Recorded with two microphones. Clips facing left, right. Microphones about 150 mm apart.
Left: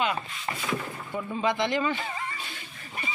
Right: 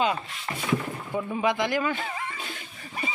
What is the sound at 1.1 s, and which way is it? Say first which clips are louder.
Speech: right 2 dB; 15° right (ahead or behind).